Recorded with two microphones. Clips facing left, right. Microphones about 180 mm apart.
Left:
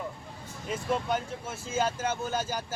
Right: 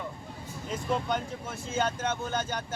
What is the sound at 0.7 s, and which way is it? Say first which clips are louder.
Speech: left 1 dB; 5° left (ahead or behind).